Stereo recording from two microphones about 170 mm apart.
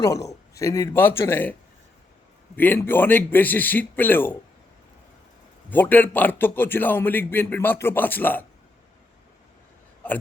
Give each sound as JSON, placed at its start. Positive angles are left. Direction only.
{"t": 0.0, "sound": "a man's voice", "side_deg": 20}
{"t": 2.6, "sound": "a man's voice", "side_deg": 10}
{"t": 5.7, "sound": "a man's voice", "side_deg": 10}
{"t": 10.0, "sound": "speech", "side_deg": 10}